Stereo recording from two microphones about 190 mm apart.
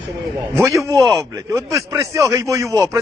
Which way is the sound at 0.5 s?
15° right (ahead or behind).